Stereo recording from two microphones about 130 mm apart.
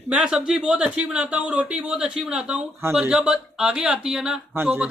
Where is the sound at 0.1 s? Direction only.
5° right (ahead or behind).